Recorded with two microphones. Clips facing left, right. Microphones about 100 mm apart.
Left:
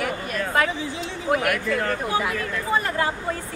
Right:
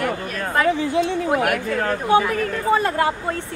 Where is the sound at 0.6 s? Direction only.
60° right (ahead or behind).